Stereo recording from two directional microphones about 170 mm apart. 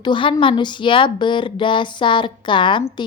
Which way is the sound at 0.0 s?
30° left (ahead or behind).